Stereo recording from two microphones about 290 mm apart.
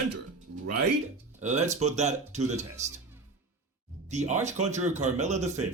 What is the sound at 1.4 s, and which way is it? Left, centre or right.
Speech, right.